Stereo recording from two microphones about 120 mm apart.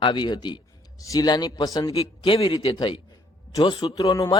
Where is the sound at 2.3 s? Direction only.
50° left (ahead or behind).